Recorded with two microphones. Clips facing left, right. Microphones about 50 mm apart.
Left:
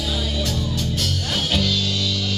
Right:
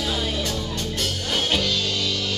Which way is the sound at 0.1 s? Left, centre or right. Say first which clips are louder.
Even; centre.